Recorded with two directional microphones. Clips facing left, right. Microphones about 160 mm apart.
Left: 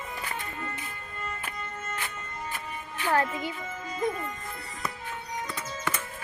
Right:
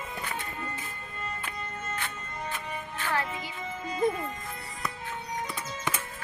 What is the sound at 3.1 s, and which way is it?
Music, 50° left (ahead or behind).